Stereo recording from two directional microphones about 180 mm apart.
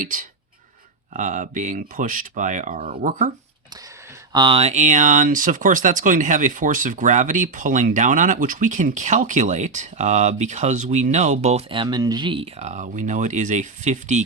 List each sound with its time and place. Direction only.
0.0 s speech: 45° right (ahead or behind)
4.3 s speech: 25° right (ahead or behind)